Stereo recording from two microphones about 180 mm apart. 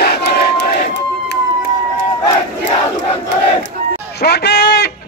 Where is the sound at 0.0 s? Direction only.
65° left (ahead or behind).